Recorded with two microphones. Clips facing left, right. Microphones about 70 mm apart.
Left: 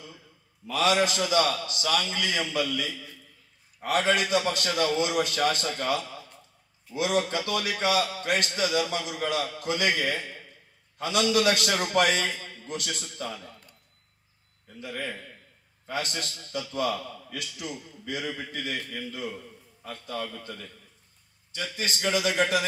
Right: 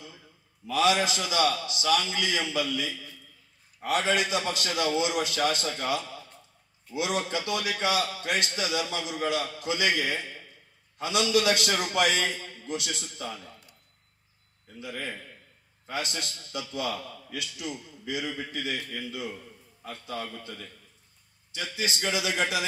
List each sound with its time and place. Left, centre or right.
0.7 s a man's voice: left
7.2 s a man's voice: left
14.8 s a man's voice: left